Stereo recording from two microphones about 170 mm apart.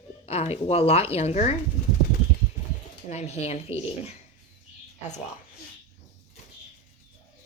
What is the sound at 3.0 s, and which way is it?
Speech, 40° left (ahead or behind).